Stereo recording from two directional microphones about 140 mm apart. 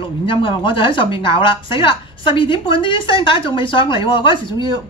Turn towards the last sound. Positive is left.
turn(degrees=35)  # may be behind; listen again after turning